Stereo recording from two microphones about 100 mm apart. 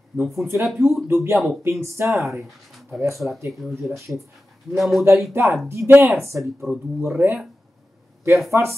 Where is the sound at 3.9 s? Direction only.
30° right (ahead or behind).